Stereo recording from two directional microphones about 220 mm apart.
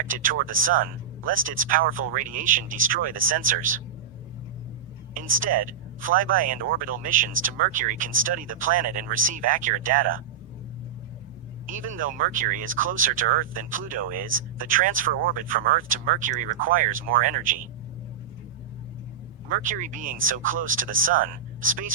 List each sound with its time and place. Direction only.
0.0 s speech: 35° right (ahead or behind)
5.4 s speech: 40° right (ahead or behind)
11.6 s speech: 35° right (ahead or behind)
19.5 s speech: 35° right (ahead or behind)